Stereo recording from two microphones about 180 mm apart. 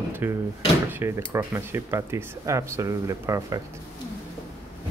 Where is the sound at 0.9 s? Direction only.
15° right (ahead or behind).